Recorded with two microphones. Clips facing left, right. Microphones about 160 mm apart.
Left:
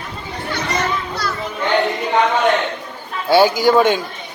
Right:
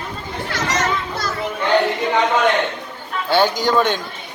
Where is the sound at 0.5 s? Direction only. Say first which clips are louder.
Even; 90° right.